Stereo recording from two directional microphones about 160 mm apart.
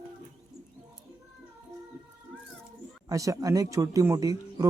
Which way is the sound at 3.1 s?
20° right (ahead or behind).